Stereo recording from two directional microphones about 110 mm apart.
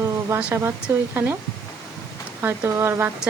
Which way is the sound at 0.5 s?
25° right (ahead or behind).